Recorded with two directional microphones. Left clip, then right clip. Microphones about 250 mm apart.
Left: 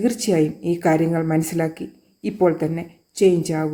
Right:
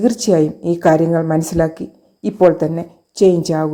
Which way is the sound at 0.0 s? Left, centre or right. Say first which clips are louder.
Right 5 dB; centre.